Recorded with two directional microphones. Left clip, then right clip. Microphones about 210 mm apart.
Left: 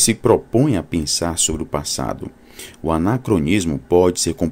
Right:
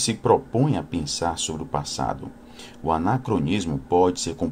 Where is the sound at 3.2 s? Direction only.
45° left (ahead or behind).